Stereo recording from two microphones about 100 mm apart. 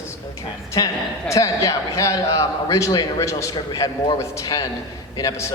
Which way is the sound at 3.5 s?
45° left (ahead or behind).